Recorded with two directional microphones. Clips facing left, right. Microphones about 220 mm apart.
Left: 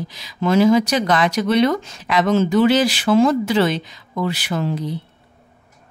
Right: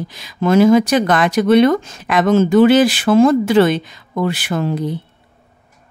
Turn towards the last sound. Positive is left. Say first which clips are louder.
# right 3 dB
turn(degrees=-50)  # may be behind; listen again after turning